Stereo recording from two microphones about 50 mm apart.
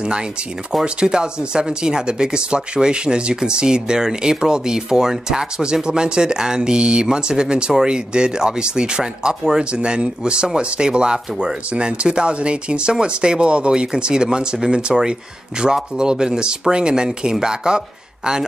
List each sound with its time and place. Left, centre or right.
0.8 s speech: centre
9.7 s speech: right